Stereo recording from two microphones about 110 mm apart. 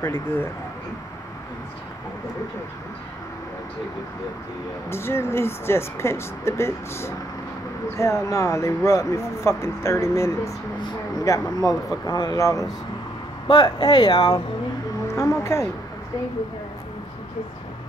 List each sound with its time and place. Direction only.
0.0 s speech: 25° left (ahead or behind)
4.8 s speech: 20° left (ahead or behind)